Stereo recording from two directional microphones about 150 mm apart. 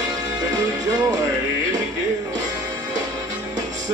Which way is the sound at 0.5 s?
25° right (ahead or behind).